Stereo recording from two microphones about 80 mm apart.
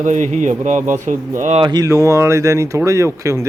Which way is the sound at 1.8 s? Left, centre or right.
Right.